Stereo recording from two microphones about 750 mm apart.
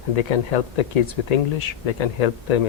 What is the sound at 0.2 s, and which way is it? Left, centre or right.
Speech, left.